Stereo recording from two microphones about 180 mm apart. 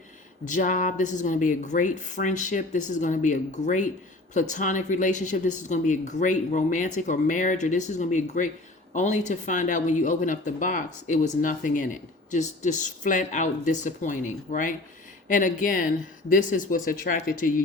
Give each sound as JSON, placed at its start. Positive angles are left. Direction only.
{"t": 0.4, "sound": "speech", "side_deg": 45}